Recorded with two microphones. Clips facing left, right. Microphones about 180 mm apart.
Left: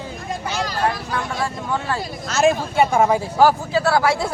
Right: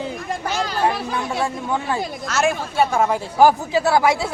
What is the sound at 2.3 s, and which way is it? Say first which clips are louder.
Speech: left 4 dB; 20° left (ahead or behind).